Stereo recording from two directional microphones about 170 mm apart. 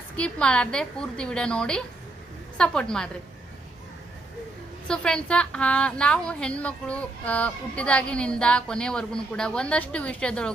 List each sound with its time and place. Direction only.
0.2 s a woman's voice: 5° left (ahead or behind)
4.9 s a woman's voice: 5° left (ahead or behind)